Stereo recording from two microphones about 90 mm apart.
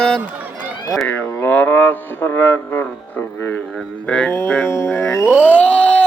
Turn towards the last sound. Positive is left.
turn(degrees=15)  # may be behind; listen again after turning